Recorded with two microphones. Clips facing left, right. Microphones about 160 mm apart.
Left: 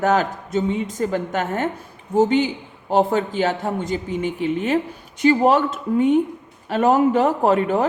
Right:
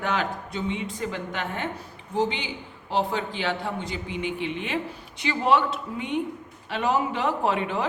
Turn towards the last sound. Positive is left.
turn(degrees=45)  # may be behind; listen again after turning